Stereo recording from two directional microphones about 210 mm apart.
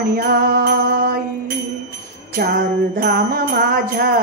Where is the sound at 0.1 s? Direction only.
45° right (ahead or behind).